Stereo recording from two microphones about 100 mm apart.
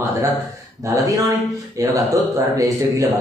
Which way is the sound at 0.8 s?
35° right (ahead or behind).